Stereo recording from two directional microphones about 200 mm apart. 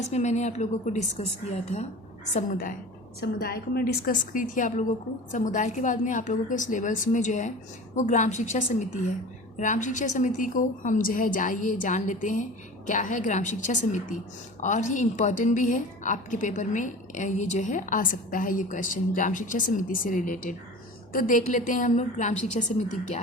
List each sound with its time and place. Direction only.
0.1 s a woman's voice: 35° left (ahead or behind)
3.2 s a woman's voice: 50° left (ahead or behind)